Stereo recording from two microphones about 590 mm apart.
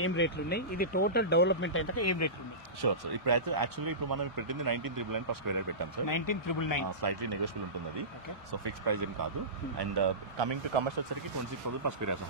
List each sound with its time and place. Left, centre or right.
0.0 s speech: centre
2.8 s speech: right
6.0 s speech: left
6.9 s speech: right
12.0 s speech: right